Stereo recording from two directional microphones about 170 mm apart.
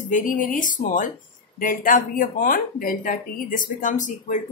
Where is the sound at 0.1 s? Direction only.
55° left (ahead or behind).